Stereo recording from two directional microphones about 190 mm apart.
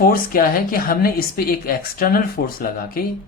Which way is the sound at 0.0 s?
50° left (ahead or behind).